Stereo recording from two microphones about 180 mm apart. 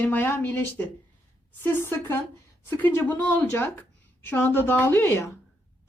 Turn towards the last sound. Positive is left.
turn(degrees=15)  # may be behind; listen again after turning